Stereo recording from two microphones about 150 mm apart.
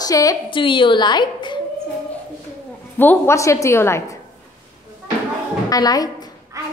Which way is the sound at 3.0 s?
15° left (ahead or behind).